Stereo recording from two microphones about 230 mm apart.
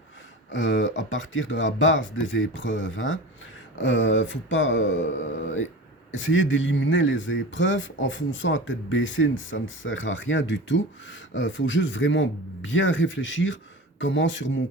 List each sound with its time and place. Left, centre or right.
0.5 s mantra: left
14.0 s speech: left